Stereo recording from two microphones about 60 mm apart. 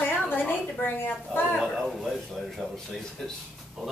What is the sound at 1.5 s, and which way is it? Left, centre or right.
Speech, centre.